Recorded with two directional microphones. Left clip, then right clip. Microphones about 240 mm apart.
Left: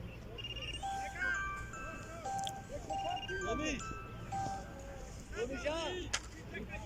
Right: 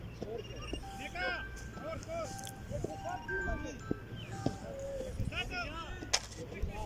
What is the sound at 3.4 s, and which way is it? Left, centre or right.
Music, left.